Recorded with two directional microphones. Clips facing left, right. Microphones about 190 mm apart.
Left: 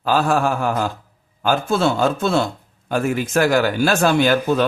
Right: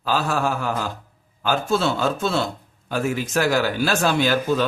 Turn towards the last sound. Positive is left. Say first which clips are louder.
# left 3 dB
turn(degrees=55)  # may be behind; listen again after turning